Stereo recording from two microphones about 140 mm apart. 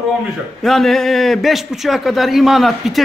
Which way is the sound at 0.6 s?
Centre (ahead or behind).